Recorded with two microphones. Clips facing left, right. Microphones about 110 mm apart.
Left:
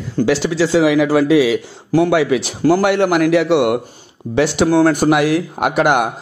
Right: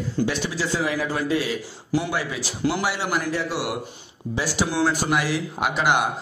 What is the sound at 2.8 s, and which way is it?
A man's voice, 60° left (ahead or behind).